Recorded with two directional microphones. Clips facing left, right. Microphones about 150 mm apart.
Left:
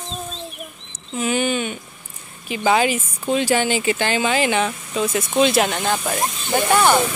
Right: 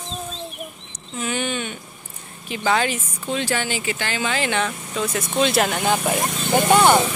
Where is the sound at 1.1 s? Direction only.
10° left (ahead or behind).